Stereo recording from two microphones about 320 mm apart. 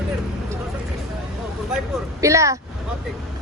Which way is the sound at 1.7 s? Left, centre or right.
Centre.